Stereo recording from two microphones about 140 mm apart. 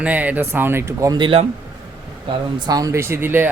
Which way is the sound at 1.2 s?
40° right (ahead or behind).